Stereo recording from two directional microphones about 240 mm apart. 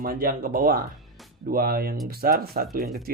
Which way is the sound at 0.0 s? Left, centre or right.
Right.